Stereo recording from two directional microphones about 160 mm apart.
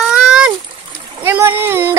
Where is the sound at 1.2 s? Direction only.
15° right (ahead or behind).